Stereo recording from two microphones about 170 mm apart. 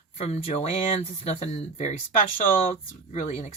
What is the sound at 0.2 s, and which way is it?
Speech, 35° left (ahead or behind).